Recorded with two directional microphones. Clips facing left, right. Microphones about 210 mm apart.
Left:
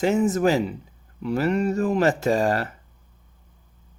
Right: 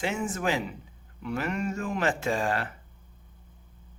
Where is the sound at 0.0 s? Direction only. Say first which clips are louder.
Left 10 dB; 40° left (ahead or behind).